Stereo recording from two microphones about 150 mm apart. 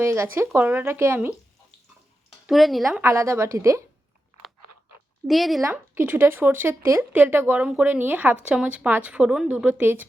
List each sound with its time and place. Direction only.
0.0 s speech: 15° right (ahead or behind)
2.5 s speech: centre (ahead or behind)
3.0 s a woman's voice: 20° right (ahead or behind)
5.3 s speech: centre (ahead or behind)
5.7 s speech: 15° right (ahead or behind)